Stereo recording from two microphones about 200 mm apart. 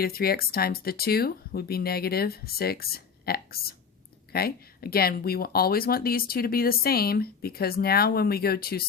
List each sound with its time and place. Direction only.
0.0 s speech: 50° left (ahead or behind)